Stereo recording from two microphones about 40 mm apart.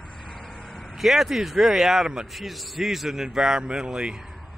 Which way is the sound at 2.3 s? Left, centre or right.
Centre.